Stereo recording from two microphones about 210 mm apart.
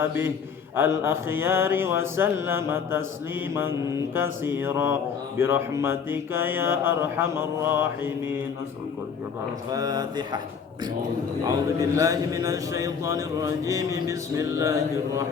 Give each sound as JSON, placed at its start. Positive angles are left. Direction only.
{"t": 0.0, "sound": "a man's voice", "side_deg": -10}
{"t": 9.7, "sound": "a man's voice", "side_deg": -20}
{"t": 11.4, "sound": "a man's voice", "side_deg": -15}